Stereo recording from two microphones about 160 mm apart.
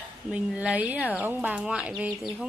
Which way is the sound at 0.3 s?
5° right (ahead or behind).